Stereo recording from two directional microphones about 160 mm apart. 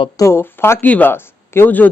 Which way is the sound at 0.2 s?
15° left (ahead or behind).